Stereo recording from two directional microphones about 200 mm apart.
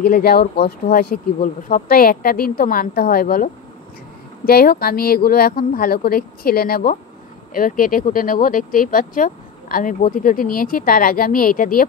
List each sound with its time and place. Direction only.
0.0 s speech: 50° left (ahead or behind)
4.5 s speech: 50° left (ahead or behind)